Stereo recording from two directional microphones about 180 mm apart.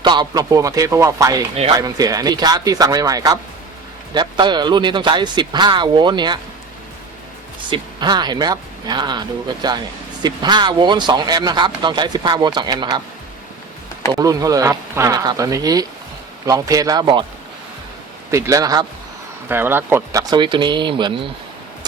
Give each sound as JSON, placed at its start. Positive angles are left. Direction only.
{"t": 0.0, "sound": "speech", "side_deg": -25}
{"t": 7.7, "sound": "speech", "side_deg": -25}
{"t": 14.1, "sound": "speech", "side_deg": -20}
{"t": 18.3, "sound": "speech", "side_deg": -15}